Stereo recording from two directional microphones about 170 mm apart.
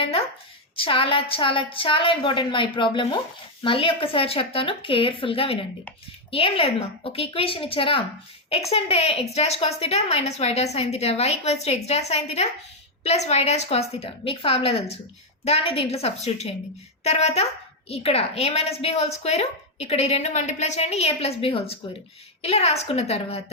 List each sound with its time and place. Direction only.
0.0 s a woman's voice: 35° left (ahead or behind)